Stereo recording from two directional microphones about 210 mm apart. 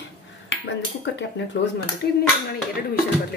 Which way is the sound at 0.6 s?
60° left (ahead or behind).